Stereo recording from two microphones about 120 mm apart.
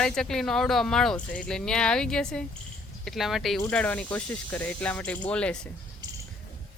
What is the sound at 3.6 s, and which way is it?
Speech, 15° left (ahead or behind).